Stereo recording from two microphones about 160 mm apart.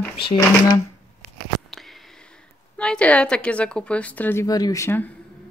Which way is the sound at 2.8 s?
5° left (ahead or behind).